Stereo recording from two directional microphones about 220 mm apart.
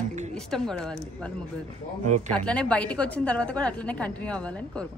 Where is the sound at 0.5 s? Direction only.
5° left (ahead or behind).